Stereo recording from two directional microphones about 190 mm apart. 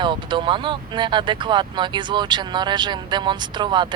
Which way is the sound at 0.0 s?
25° right (ahead or behind).